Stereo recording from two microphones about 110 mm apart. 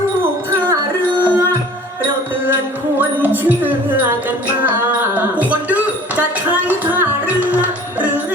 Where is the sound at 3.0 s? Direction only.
15° right (ahead or behind).